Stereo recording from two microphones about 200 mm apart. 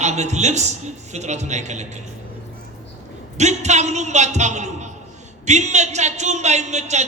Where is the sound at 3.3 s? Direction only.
35° right (ahead or behind).